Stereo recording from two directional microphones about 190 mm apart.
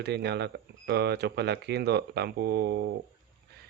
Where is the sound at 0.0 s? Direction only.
60° right (ahead or behind).